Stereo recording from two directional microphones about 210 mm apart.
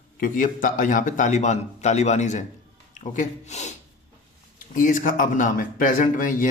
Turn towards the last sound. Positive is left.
turn(degrees=40)  # may be behind; listen again after turning